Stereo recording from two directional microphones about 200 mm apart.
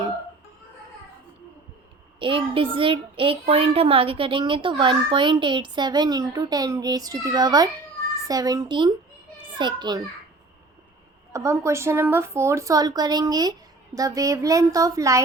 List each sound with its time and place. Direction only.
2.1 s a child's voice: 25° right (ahead or behind)
11.3 s a woman's voice: 15° right (ahead or behind)